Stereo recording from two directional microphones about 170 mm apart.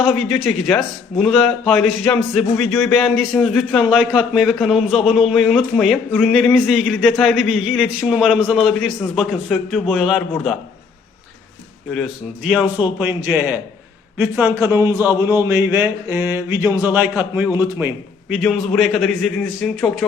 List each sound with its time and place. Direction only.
0.4 s speech: 10° left (ahead or behind)
1.2 s a man's voice: centre (ahead or behind)
12.5 s a man's voice: 5° right (ahead or behind)
14.2 s a sound: 5° right (ahead or behind)
18.3 s a man's voice: centre (ahead or behind)